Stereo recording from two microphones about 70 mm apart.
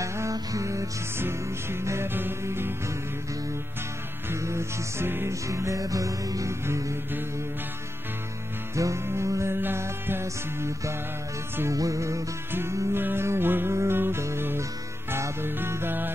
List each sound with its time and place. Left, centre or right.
0.0 s music: right
1.1 s music: right
4.3 s music: right
5.3 s music: right
6.6 s music: right
8.7 s music: right
11.7 s music: right
12.5 s music: right